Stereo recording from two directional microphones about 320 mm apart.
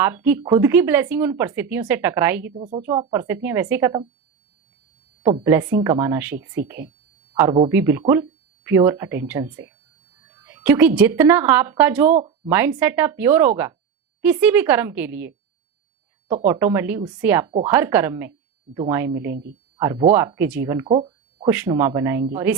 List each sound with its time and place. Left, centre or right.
0.0 s speech: centre
2.6 s speech: centre
5.2 s speech: centre
7.7 s a woman's voice: centre
16.4 s speech: centre
20.8 s a sound: centre
21.5 s speech: centre